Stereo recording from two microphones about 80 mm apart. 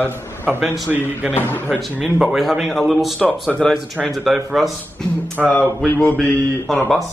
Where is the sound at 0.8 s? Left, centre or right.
Right.